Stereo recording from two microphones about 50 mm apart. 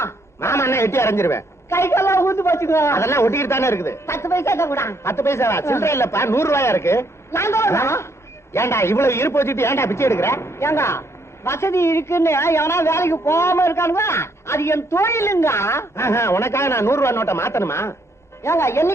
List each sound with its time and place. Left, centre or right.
0.0 s a woman's voice: left